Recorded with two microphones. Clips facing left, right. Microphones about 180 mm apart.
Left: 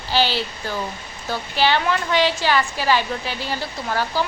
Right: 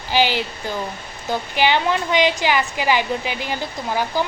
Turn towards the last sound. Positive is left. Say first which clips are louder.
# right 1 dB
turn(degrees=-15)  # may be behind; listen again after turning